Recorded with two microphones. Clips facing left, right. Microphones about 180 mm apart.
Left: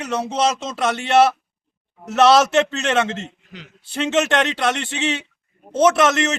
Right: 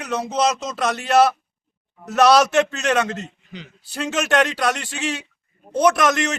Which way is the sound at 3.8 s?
25° left (ahead or behind).